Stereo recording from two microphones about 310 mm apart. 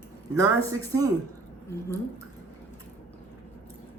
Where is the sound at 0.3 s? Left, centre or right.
Centre.